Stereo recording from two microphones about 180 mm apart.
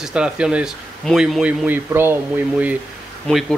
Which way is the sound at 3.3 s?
Centre (ahead or behind).